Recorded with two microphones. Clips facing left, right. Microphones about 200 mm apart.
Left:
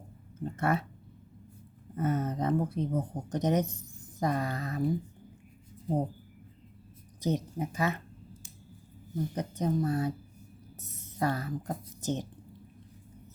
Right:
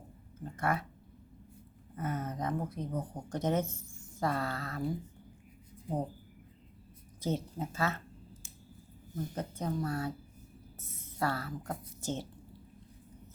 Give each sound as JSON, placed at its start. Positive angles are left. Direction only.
{"t": 0.4, "sound": "speech", "side_deg": 25}
{"t": 2.0, "sound": "speech", "side_deg": 25}
{"t": 7.2, "sound": "speech", "side_deg": 15}
{"t": 9.1, "sound": "speech", "side_deg": 15}
{"t": 10.8, "sound": "a sound", "side_deg": 20}
{"t": 11.7, "sound": "speech", "side_deg": 20}